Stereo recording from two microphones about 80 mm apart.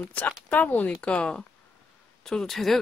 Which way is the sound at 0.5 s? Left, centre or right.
Left.